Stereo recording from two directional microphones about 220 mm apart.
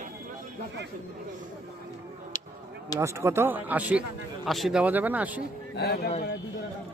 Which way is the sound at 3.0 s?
10° right (ahead or behind).